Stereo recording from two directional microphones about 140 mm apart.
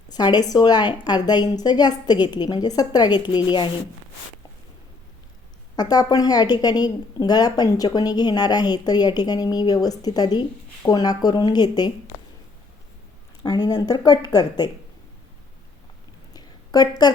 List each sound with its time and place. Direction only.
0.1 s a woman's voice: 30° left (ahead or behind)
5.7 s a woman's voice: 30° left (ahead or behind)
13.4 s speech: 30° left (ahead or behind)
16.3 s a sound: 30° left (ahead or behind)